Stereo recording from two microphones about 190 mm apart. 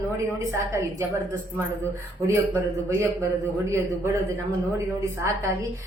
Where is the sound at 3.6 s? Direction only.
15° right (ahead or behind).